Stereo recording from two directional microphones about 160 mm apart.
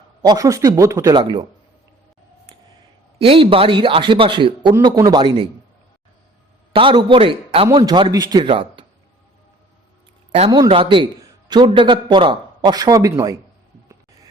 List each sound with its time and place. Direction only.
0.2 s a man's voice: 25° right (ahead or behind)
3.2 s a man's voice: 35° right (ahead or behind)
6.7 s a man's voice: 30° right (ahead or behind)
10.7 s a man's voice: 35° right (ahead or behind)